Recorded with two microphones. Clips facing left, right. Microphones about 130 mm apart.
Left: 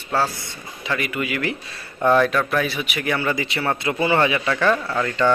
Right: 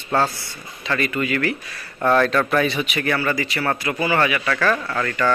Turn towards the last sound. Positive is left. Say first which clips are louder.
# left 2 dB
turn(degrees=15)  # may be behind; listen again after turning